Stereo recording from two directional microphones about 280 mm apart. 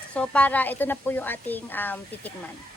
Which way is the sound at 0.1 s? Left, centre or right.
Centre.